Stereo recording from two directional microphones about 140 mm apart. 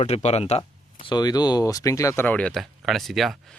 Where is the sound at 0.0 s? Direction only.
50° left (ahead or behind); by 2.2 s 20° left (ahead or behind).